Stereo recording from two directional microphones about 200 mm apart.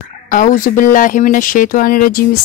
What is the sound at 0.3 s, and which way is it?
Speech, 40° left (ahead or behind).